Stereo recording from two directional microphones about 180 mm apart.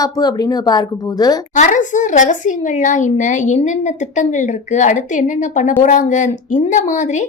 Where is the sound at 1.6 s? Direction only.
45° left (ahead or behind).